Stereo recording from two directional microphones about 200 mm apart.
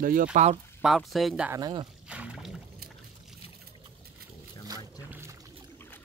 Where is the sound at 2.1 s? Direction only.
5° right (ahead or behind).